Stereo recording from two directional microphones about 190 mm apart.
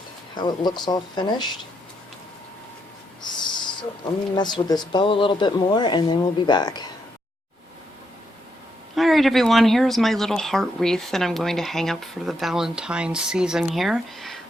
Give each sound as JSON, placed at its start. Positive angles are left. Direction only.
{"t": 0.3, "sound": "speech", "side_deg": 25}
{"t": 3.2, "sound": "owl", "side_deg": 25}
{"t": 4.4, "sound": "speech", "side_deg": 25}
{"t": 9.0, "sound": "speech", "side_deg": 0}